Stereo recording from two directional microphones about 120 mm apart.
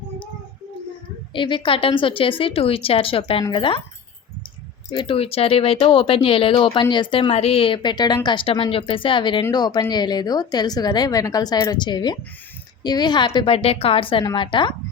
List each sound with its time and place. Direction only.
1.3 s a woman's voice: 45° left (ahead or behind)
4.9 s a woman's voice: 45° left (ahead or behind)